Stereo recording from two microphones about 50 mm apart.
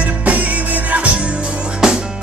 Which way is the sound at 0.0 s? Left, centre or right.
Right.